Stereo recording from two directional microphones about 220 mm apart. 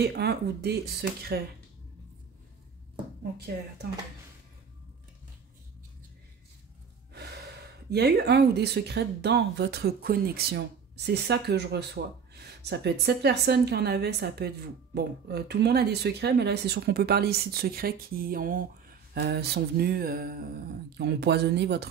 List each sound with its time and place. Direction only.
0.0 s speech: 45° right (ahead or behind)
7.9 s speech: 45° right (ahead or behind)